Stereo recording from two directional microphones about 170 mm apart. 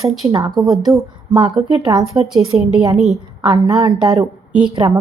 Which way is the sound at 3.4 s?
20° right (ahead or behind).